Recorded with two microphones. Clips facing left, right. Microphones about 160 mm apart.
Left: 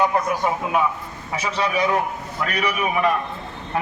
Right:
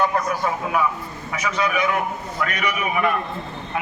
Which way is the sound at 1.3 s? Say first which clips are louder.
Even; 30° left (ahead or behind).